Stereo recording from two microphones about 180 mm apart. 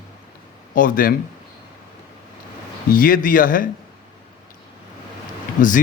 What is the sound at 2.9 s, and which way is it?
Speech, 50° left (ahead or behind).